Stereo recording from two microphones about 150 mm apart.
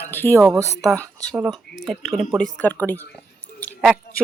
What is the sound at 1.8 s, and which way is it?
Speech, centre (ahead or behind).